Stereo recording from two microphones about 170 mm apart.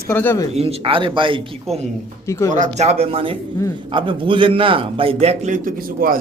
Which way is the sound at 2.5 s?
45° right (ahead or behind).